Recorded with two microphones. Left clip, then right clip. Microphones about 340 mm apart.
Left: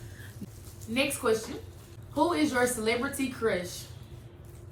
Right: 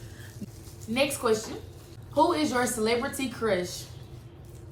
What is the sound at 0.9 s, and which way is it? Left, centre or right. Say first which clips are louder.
A woman's voice: right 2 dB; centre.